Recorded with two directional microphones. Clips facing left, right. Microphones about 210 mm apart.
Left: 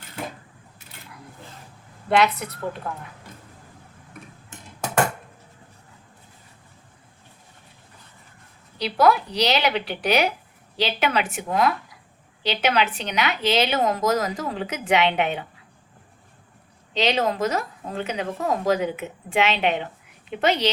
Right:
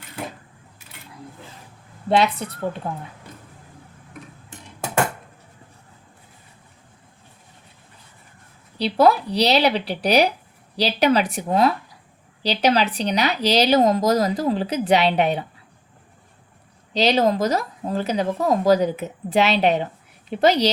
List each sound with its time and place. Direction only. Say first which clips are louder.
2.0 s a woman's voice: right 1 dB; 30° right (ahead or behind)
8.8 s speech: right 2 dB; 30° right (ahead or behind)
16.9 s speech: right 4 dB; 40° right (ahead or behind)